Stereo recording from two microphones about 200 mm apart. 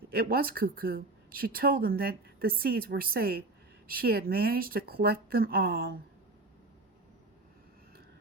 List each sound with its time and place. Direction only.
0.1 s speech: 50° right (ahead or behind)